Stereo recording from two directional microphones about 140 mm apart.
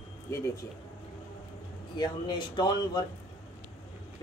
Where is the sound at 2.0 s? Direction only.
30° left (ahead or behind).